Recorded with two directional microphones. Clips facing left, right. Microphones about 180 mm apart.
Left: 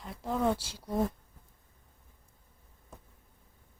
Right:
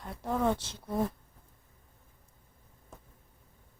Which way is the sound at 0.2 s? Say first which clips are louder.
Even; centre (ahead or behind).